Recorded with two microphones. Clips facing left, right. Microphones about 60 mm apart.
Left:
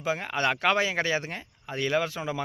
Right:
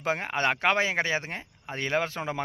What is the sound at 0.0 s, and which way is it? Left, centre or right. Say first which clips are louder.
Speech: right 1 dB; right.